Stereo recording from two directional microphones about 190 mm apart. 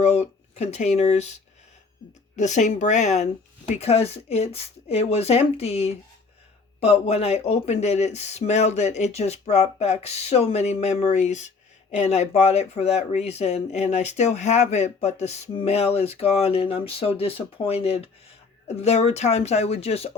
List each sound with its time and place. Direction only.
0.0 s speech: 35° left (ahead or behind)
2.3 s speech: 40° left (ahead or behind)